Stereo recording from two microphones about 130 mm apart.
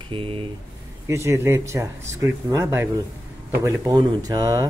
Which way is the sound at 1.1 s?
20° right (ahead or behind).